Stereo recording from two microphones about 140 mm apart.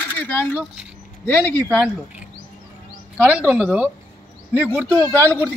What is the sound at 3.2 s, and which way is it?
A woman's voice, 10° right (ahead or behind).